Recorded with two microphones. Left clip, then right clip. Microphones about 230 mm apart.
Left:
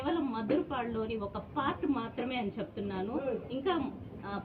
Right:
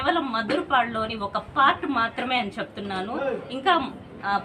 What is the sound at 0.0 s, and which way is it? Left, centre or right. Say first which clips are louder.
A woman's voice: right 10 dB; right.